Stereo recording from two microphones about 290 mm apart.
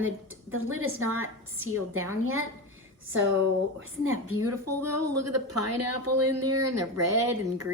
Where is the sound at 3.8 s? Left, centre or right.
Right.